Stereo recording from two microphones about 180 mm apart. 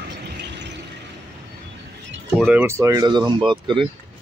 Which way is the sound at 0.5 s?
75° right (ahead or behind).